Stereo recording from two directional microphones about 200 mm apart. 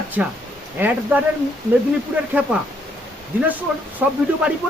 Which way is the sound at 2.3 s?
5° right (ahead or behind).